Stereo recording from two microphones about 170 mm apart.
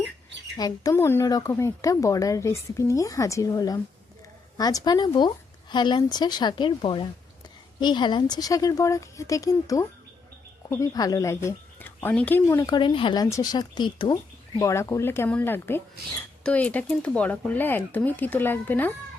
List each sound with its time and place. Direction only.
0.5 s speech: 20° left (ahead or behind)
14.5 s speech: 15° left (ahead or behind)